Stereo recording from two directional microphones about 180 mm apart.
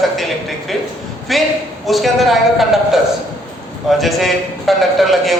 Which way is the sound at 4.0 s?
Centre (ahead or behind).